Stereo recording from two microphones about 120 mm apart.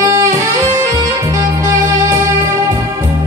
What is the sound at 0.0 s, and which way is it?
Saxophone, 25° right (ahead or behind).